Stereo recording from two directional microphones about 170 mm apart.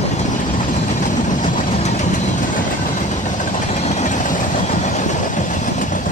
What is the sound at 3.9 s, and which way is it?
Train, 50° left (ahead or behind).